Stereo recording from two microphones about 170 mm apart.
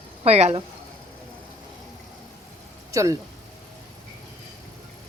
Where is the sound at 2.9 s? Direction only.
20° right (ahead or behind).